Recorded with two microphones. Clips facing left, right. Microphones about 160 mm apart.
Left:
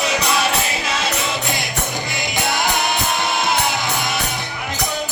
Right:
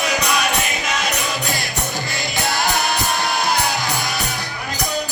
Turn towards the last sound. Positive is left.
turn(degrees=20)  # may be behind; listen again after turning